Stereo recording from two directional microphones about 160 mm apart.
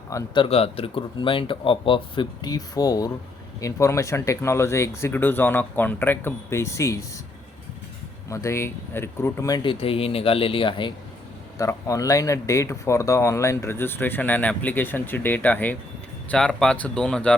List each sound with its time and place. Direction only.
0.3 s speech: 35° left (ahead or behind); by 7.0 s 20° left (ahead or behind)
8.3 s speech: 20° left (ahead or behind)
9.6 s speech: 35° left (ahead or behind)
11.5 s speech: 20° left (ahead or behind); by 17.3 s 5° left (ahead or behind)